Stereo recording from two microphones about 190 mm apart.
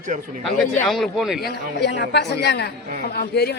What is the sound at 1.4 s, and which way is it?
A woman's voice, 60° left (ahead or behind).